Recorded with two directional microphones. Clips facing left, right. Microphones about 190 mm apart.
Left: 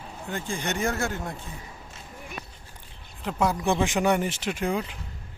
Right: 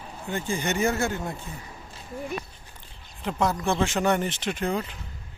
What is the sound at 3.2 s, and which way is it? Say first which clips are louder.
Speech: even; 5° left (ahead or behind).